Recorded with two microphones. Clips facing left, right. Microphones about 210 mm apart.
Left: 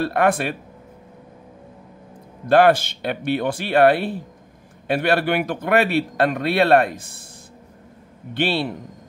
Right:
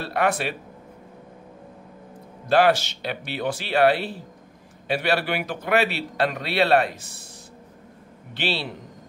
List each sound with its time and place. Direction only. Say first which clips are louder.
0.0 s a man's voice: left 5 dB; 50° left (ahead or behind)
2.4 s a man's voice: left 4 dB; 55° left (ahead or behind)
8.4 s a man's voice: left 6 dB; 50° left (ahead or behind)